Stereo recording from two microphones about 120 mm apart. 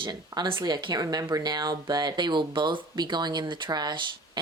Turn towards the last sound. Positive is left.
turn(degrees=-35)  # may be behind; listen again after turning